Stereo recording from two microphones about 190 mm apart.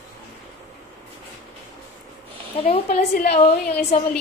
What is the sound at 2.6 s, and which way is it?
A woman's voice, 35° left (ahead or behind).